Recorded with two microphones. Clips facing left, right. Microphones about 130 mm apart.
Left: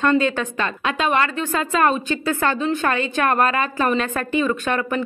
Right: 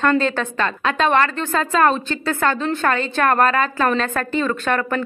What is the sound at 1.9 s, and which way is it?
A woman's voice, 15° left (ahead or behind).